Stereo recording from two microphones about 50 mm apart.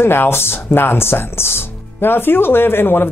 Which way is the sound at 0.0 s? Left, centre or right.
Left.